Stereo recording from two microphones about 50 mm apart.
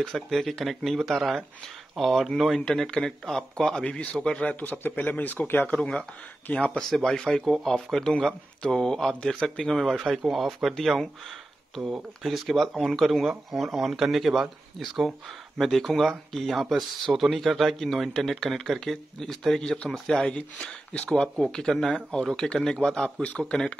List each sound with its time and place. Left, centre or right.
0.0 s speech: centre
2.6 s a man's voice: centre
4.5 s speech: left
5.7 s a man's voice: left
6.8 s speech: centre
12.4 s speech: centre